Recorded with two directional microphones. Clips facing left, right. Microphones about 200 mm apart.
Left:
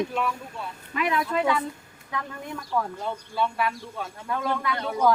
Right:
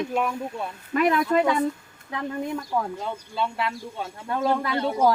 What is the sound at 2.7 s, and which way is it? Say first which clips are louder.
Speech: even; 10° right (ahead or behind).